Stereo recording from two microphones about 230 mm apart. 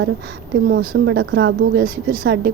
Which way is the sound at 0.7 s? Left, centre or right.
Right.